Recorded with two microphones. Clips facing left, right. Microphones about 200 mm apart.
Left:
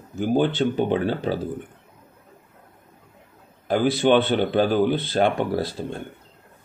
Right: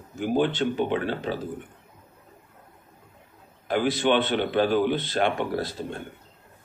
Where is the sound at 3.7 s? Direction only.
35° left (ahead or behind).